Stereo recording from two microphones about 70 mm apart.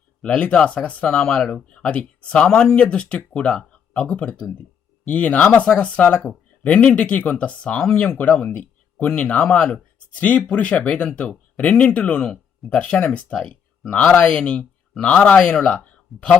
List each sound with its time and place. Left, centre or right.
0.2 s speech: centre
8.2 s speech: centre
15.1 s speech: left